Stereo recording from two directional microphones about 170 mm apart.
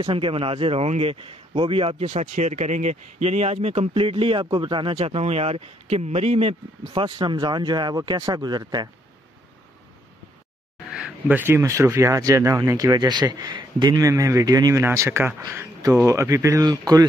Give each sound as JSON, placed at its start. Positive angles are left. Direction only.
{"t": 0.0, "sound": "speech", "side_deg": -30}
{"t": 10.9, "sound": "speech", "side_deg": -5}